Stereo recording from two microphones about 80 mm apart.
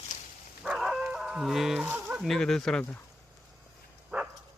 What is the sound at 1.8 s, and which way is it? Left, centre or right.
Speech, right.